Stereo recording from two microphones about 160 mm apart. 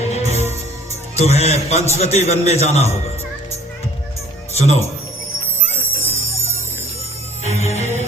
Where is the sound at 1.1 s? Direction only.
40° left (ahead or behind).